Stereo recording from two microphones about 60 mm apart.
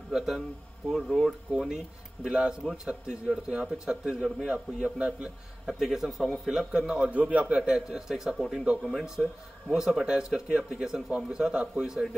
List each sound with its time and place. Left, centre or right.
0.1 s a man's voice: centre
1.2 s a man's voice: centre
4.8 s a man's voice: centre
5.8 s a man's voice: centre